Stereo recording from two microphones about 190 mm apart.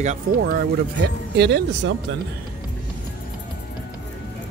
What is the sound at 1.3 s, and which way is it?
Speech, 65° right (ahead or behind).